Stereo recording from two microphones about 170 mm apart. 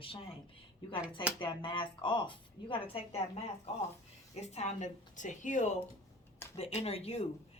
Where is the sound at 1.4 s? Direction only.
30° left (ahead or behind).